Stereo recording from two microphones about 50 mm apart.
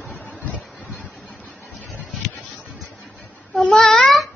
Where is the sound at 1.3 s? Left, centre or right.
Left.